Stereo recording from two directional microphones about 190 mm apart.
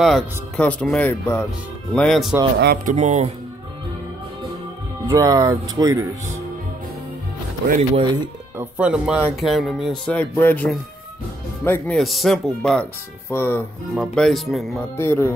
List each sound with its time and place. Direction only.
0.0 s speech: 5° left (ahead or behind)
2.6 s speech: 50° right (ahead or behind)
5.0 s speech: 15° right (ahead or behind)
7.9 s speech: 25° right (ahead or behind)
8.5 s speech: 5° right (ahead or behind); by 12.0 s 10° left (ahead or behind)
12.0 s speech: centre (ahead or behind)
15.0 s speech: 15° left (ahead or behind)